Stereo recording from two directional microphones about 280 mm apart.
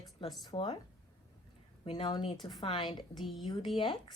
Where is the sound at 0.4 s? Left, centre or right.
Centre.